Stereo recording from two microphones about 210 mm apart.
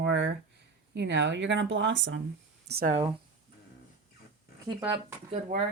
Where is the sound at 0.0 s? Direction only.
55° right (ahead or behind).